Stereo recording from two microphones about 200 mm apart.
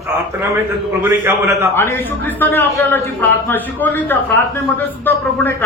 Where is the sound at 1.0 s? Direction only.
15° right (ahead or behind).